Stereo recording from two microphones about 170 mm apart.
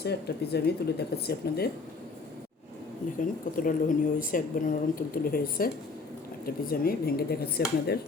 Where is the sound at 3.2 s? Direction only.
55° left (ahead or behind).